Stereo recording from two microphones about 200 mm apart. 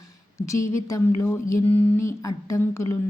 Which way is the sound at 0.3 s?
15° left (ahead or behind).